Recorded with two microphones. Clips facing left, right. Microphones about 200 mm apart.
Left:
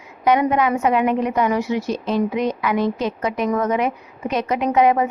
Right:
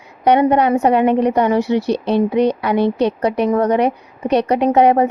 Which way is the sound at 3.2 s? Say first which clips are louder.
Right 3 dB; 35° right (ahead or behind).